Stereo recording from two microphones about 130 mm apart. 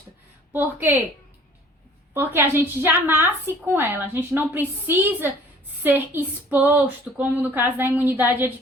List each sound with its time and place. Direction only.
0.5 s speech: 15° right (ahead or behind)
2.1 s speech: 15° right (ahead or behind)